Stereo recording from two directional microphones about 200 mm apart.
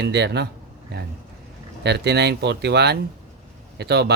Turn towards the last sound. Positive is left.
turn(degrees=-55)  # may be behind; listen again after turning